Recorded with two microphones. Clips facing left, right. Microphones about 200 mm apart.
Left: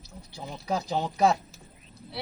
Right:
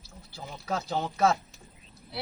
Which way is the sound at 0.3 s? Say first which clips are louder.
Left 3 dB; 15° left (ahead or behind).